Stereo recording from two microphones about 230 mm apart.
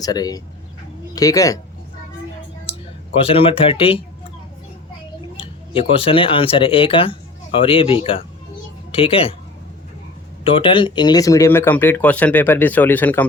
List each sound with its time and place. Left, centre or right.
0.0 s speech: centre
3.2 s speech: left
6.0 s speech: left
10.4 s speech: left; by 13.2 s centre